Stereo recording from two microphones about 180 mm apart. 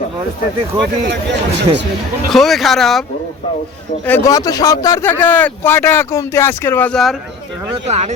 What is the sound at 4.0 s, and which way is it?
Speech, 15° left (ahead or behind).